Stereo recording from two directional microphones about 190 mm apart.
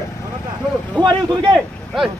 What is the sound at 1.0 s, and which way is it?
Speech, 20° right (ahead or behind).